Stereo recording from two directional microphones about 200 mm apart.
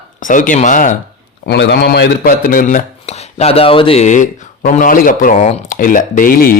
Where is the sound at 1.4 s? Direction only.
60° left (ahead or behind).